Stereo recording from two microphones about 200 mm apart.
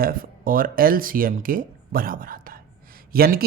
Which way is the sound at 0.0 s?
45° right (ahead or behind).